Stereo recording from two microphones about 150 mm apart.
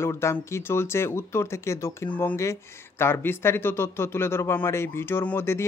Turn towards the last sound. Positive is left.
turn(degrees=15)  # may be behind; listen again after turning